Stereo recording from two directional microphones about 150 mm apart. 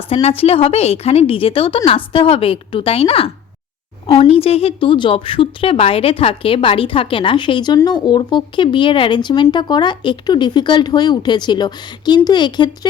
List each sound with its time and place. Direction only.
0.1 s a woman's voice: 40° left (ahead or behind)